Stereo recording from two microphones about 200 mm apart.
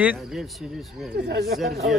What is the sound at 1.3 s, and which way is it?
Speech, 55° right (ahead or behind).